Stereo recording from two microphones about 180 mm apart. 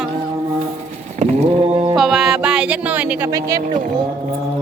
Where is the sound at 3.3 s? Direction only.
20° right (ahead or behind).